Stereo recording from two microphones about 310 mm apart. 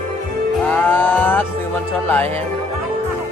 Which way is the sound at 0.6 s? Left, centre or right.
Centre.